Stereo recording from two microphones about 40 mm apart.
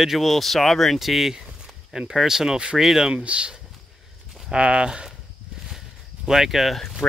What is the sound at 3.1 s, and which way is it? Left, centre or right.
Speech, right.